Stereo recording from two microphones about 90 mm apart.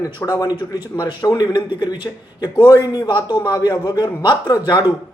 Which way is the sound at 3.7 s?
45° left (ahead or behind).